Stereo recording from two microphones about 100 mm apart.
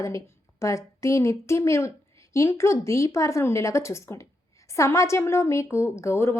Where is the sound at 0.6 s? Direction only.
30° left (ahead or behind).